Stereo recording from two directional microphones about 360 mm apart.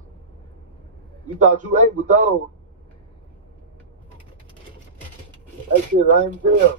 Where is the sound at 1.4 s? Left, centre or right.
Right.